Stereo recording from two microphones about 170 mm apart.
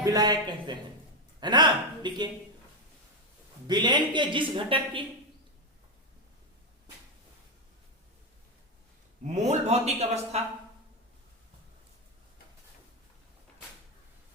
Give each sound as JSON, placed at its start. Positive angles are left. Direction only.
{"t": 0.0, "sound": "a woman's voice", "side_deg": -20}
{"t": 3.7, "sound": "a woman's voice", "side_deg": -25}
{"t": 9.2, "sound": "a man's voice", "side_deg": -45}